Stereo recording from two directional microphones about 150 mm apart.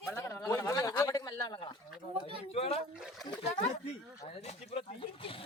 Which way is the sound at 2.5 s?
45° left (ahead or behind).